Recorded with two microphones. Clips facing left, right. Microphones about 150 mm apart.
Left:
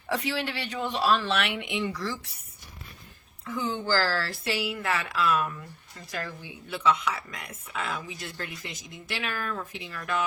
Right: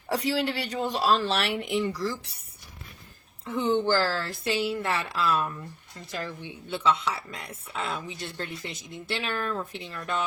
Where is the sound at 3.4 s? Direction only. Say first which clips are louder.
Right 5 dB; 25° right (ahead or behind).